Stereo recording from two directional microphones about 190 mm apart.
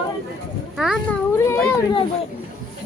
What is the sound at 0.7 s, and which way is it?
Speech, centre (ahead or behind).